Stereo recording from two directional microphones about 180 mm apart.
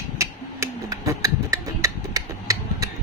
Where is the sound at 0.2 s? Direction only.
15° right (ahead or behind).